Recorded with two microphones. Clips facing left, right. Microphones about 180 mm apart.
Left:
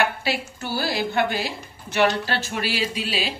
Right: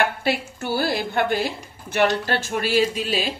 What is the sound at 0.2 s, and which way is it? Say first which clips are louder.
Speech: right 3 dB; 55° right (ahead or behind).